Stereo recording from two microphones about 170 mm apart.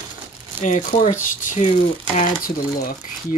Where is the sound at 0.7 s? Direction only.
45° left (ahead or behind).